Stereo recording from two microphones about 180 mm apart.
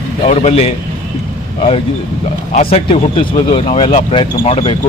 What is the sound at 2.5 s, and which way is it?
A man's voice, 35° left (ahead or behind).